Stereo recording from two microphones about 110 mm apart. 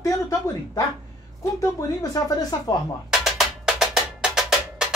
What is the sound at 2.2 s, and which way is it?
Speech, 30° left (ahead or behind).